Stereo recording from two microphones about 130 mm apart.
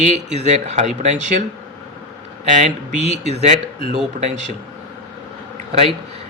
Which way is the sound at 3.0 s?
60° right (ahead or behind).